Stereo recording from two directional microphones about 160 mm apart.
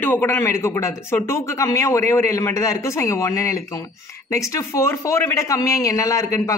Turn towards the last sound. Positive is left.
turn(degrees=20)  # may be behind; listen again after turning